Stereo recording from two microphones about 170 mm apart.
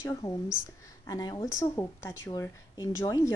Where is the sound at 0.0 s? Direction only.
20° left (ahead or behind).